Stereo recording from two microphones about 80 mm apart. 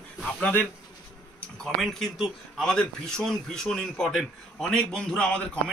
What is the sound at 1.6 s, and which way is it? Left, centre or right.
A man's voice, centre.